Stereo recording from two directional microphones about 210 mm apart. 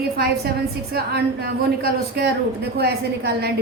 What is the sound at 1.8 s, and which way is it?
Speech, 50° right (ahead or behind).